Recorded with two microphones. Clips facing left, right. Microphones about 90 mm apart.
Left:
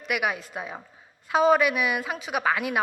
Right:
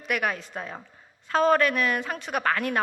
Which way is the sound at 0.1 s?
5° left (ahead or behind).